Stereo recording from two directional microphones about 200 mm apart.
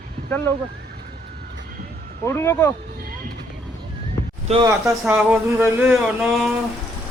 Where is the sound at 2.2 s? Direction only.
10° left (ahead or behind).